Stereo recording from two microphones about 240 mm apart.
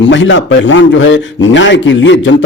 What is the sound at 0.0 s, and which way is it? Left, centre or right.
Speech, left.